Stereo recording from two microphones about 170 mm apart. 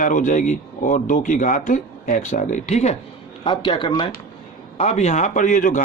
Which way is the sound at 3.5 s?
25° left (ahead or behind).